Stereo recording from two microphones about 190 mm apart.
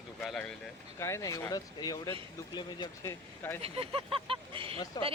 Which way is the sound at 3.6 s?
30° right (ahead or behind).